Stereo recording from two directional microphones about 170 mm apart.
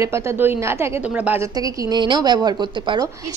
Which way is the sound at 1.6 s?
25° right (ahead or behind).